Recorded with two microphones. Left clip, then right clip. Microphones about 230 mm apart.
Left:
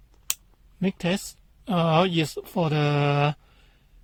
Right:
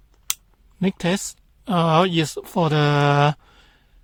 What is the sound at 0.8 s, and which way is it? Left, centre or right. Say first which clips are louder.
Speech: right 4 dB; right.